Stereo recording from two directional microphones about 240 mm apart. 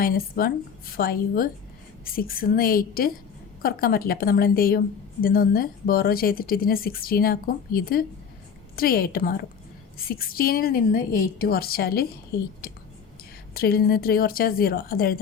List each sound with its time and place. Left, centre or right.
0.0 s speech: left
12.6 s clicking: left
13.5 s speech: left